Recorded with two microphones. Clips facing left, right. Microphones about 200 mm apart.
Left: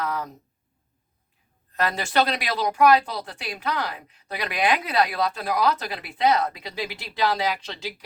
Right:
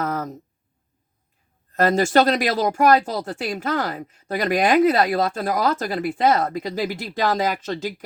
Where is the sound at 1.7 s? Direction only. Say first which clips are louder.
Right 7 dB; 45° right (ahead or behind).